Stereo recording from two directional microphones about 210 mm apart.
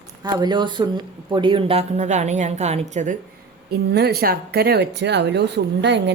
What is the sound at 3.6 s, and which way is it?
Speech, 50° right (ahead or behind).